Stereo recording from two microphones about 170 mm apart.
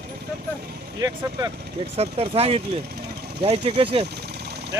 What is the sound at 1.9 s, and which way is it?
Speech, 35° right (ahead or behind).